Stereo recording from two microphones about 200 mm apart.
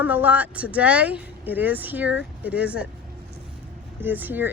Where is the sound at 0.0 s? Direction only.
10° right (ahead or behind).